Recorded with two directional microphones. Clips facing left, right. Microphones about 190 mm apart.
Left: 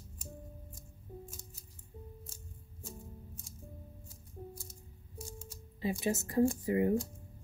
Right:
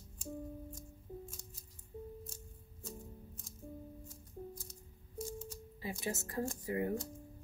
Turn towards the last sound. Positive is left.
turn(degrees=20)  # may be behind; listen again after turning